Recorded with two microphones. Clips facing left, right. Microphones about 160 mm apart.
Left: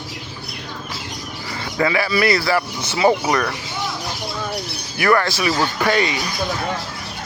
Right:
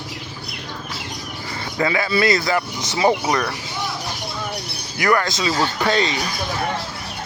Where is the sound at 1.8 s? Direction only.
30° right (ahead or behind).